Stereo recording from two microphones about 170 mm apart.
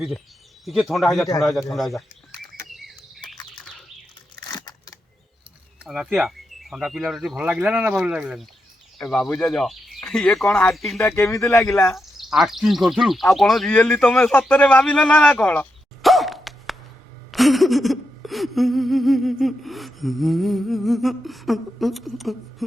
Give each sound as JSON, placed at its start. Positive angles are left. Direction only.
{"t": 0.6, "sound": "speech", "side_deg": 0}
{"t": 1.7, "sound": "frog", "side_deg": 0}
{"t": 2.6, "sound": "bird", "side_deg": 0}
{"t": 4.4, "sound": "a sound", "side_deg": 20}
{"t": 5.8, "sound": "speech", "side_deg": -5}
{"t": 11.6, "sound": "speech", "side_deg": 15}
{"t": 11.9, "sound": "a man's voice", "side_deg": 0}
{"t": 17.3, "sound": "a sound", "side_deg": 0}